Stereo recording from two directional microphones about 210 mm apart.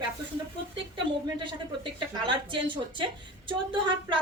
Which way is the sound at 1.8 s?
25° right (ahead or behind).